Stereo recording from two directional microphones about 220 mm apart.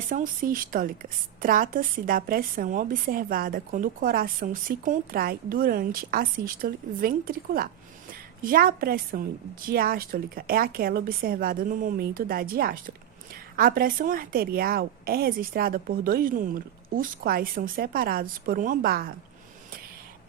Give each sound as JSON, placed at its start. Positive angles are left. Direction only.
{"t": 0.1, "sound": "a woman's voice", "side_deg": -40}